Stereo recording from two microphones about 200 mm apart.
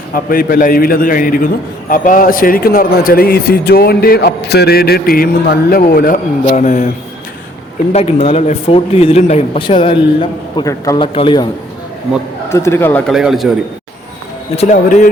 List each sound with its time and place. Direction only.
0.1 s a man's voice: 45° left (ahead or behind)
7.9 s speech: 30° left (ahead or behind)
12.5 s speech: 15° left (ahead or behind)
13.1 s a man's voice: centre (ahead or behind)
14.5 s speech: 35° left (ahead or behind)